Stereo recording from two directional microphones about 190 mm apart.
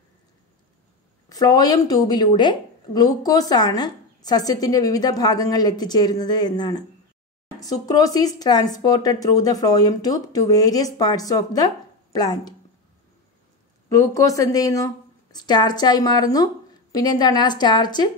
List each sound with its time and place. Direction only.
1.3 s speech: 20° left (ahead or behind)
13.8 s speech: 15° left (ahead or behind)